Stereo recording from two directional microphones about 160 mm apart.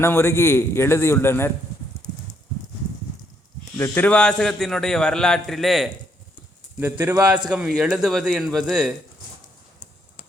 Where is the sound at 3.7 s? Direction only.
10° left (ahead or behind).